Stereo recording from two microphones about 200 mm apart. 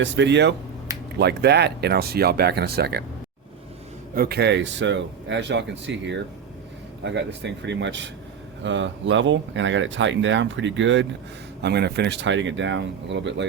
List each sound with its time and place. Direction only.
0.0 s speech: 60° right (ahead or behind)
4.1 s speech: 50° right (ahead or behind); by 11.0 s 65° right (ahead or behind)
11.6 s speech: 55° right (ahead or behind)